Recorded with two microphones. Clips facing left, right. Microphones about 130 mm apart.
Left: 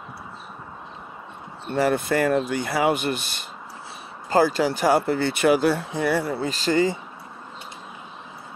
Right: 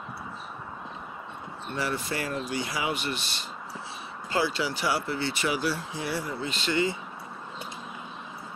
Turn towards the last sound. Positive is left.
turn(degrees=40)  # may be behind; listen again after turning